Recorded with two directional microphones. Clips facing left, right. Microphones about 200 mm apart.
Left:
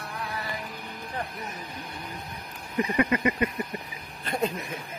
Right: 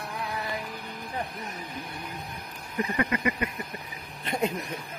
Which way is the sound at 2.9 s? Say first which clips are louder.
Left 4 dB; 25° left (ahead or behind).